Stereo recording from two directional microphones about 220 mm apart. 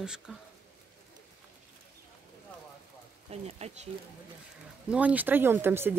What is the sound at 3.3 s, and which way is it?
Speech, 30° right (ahead or behind).